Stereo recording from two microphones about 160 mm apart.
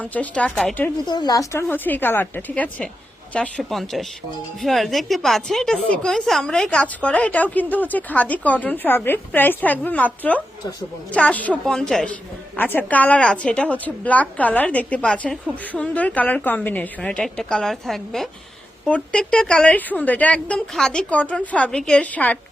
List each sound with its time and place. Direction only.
0.0 s a woman's voice: 10° left (ahead or behind)
1.0 s a woman's voice: 25° left (ahead or behind)
1.7 s a woman's voice: 10° left (ahead or behind)